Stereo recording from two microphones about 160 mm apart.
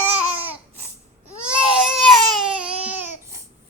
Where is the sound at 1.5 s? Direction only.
5° right (ahead or behind).